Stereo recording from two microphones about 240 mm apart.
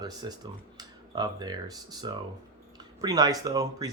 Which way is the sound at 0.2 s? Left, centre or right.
Centre.